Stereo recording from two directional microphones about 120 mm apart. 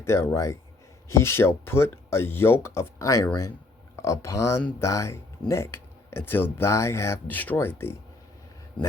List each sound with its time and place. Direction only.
0.0 s speech: 25° left (ahead or behind)